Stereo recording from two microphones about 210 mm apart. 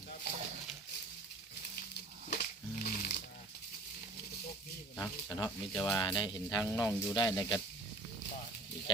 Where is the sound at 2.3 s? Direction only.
45° left (ahead or behind).